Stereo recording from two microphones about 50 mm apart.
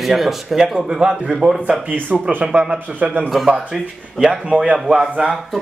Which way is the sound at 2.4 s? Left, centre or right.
Right.